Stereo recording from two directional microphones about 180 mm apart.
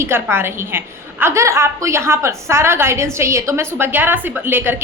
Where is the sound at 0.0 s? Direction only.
15° right (ahead or behind).